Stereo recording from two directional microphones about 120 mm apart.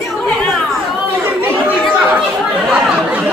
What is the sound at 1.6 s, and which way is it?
Chatter, 15° right (ahead or behind).